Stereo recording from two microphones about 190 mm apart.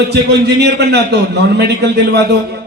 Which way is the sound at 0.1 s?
60° right (ahead or behind).